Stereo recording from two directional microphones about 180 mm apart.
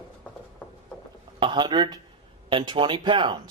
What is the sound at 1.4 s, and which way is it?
Speech, 25° right (ahead or behind).